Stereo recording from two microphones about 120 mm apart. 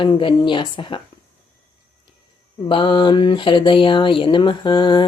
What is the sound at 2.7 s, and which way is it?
Mantra, 45° left (ahead or behind).